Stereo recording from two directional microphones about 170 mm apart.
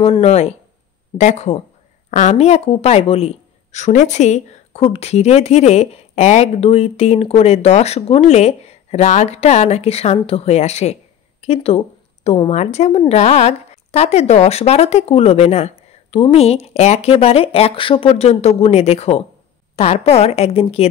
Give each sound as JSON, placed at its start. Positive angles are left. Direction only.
{"t": 0.0, "sound": "a woman's voice", "side_deg": 35}